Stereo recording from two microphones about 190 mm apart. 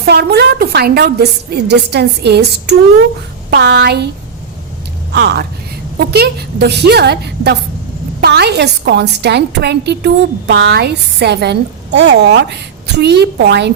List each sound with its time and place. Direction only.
0.1 s a woman's voice: 60° right (ahead or behind)
5.1 s a woman's voice: 60° right (ahead or behind)